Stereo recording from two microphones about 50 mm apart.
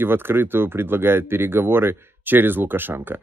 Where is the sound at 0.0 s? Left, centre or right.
Right.